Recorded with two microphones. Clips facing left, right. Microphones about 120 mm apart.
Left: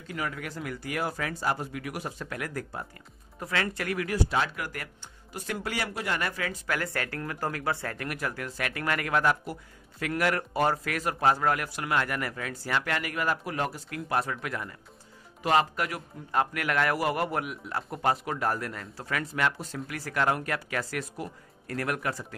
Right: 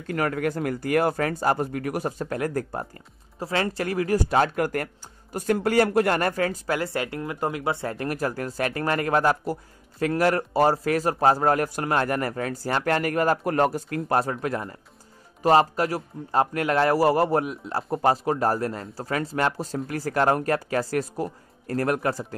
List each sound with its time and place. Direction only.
0.0 s speech: 55° right (ahead or behind)
3.3 s speech: 30° right (ahead or behind)
6.8 s speech: 20° right (ahead or behind)